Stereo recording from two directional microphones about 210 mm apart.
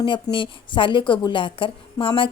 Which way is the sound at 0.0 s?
25° left (ahead or behind).